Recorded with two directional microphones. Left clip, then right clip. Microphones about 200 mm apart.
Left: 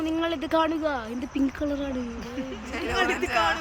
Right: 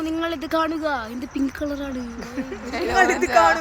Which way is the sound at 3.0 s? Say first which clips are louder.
Right 8 dB; 20° right (ahead or behind).